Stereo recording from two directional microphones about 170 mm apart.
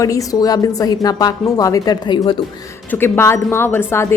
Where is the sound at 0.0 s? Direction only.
20° left (ahead or behind).